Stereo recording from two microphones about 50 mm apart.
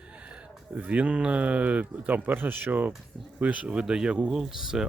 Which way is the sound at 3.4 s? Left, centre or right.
Right.